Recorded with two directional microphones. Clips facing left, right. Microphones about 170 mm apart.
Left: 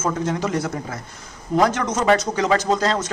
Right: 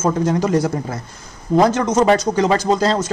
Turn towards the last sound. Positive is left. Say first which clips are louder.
# right 4 dB
turn(degrees=-30)  # may be behind; listen again after turning